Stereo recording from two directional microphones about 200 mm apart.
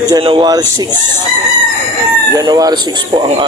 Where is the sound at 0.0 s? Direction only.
20° right (ahead or behind).